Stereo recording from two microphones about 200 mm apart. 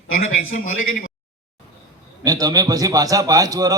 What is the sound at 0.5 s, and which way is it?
Speech, 45° left (ahead or behind).